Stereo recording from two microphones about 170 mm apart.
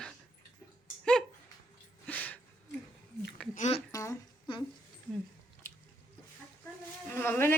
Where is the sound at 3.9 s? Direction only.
20° left (ahead or behind).